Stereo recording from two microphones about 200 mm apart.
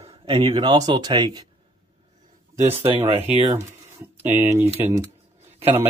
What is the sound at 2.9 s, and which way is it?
Speech, 30° right (ahead or behind).